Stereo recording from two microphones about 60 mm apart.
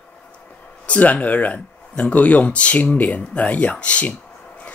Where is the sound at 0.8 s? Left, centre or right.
Left.